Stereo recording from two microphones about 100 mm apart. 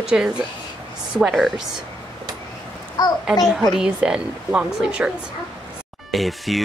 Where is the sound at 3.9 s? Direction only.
10° right (ahead or behind).